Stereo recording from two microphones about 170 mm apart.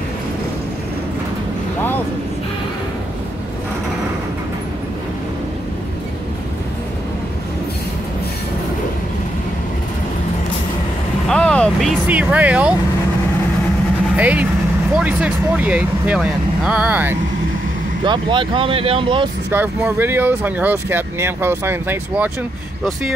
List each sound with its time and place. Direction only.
11.2 s vehicle: 5° left (ahead or behind)
12.1 s speech: 10° right (ahead or behind)
14.1 s speech: 10° right (ahead or behind)
18.0 s speech: 30° right (ahead or behind)
19.5 s speech: 10° right (ahead or behind)